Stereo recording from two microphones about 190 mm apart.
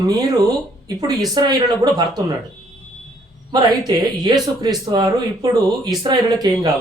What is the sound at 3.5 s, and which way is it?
Speech, 20° right (ahead or behind).